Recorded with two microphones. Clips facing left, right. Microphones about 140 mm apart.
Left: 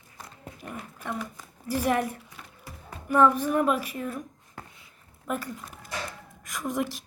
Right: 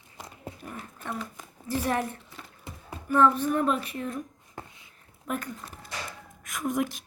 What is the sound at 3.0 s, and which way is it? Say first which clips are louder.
A woman's voice: left 1 dB; 10° left (ahead or behind).